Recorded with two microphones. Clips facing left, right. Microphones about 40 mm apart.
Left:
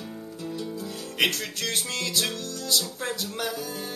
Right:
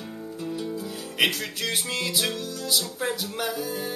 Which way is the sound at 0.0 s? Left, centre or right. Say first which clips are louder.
Right 2 dB; centre.